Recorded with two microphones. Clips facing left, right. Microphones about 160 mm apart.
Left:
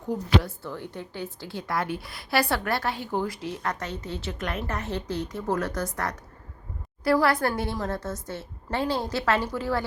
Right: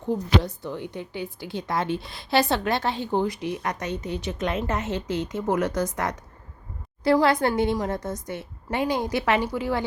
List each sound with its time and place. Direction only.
0.1 s a woman's voice: 20° right (ahead or behind)